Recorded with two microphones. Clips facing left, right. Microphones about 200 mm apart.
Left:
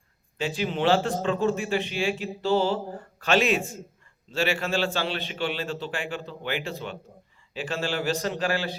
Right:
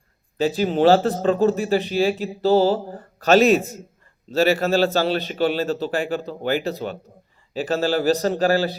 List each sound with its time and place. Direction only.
0.3 s a man's voice: 40° right (ahead or behind)